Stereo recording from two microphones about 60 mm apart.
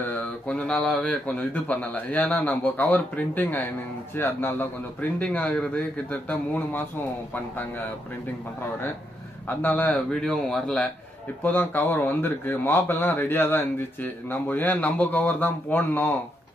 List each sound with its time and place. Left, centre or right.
0.0 s speech: left
5.2 s speech: left
9.5 s speech: left
9.8 s speech: centre
11.4 s speech: left